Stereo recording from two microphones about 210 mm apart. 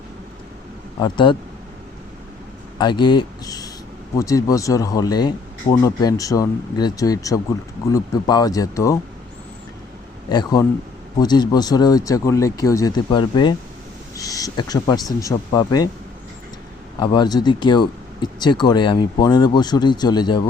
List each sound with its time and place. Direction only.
0.9 s speech: 20° left (ahead or behind)
2.7 s speech: 20° left (ahead or behind)
10.2 s speech: 20° left (ahead or behind)
17.0 s speech: 20° left (ahead or behind)